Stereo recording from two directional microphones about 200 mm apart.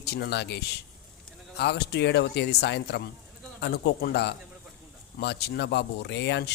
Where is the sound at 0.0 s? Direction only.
55° left (ahead or behind).